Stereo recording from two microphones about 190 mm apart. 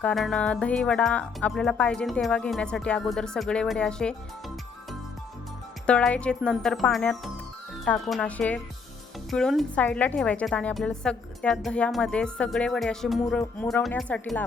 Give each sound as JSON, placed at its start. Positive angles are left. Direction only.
{"t": 0.0, "sound": "speech", "side_deg": 5}